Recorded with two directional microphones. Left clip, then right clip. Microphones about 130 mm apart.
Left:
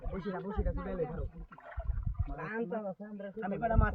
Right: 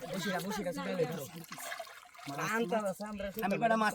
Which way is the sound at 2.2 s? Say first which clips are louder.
Right 4 dB; 20° right (ahead or behind).